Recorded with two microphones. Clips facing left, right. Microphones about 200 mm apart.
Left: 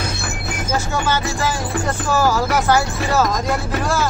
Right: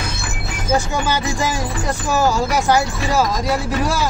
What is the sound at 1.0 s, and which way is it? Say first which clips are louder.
Speech: even; 15° right (ahead or behind).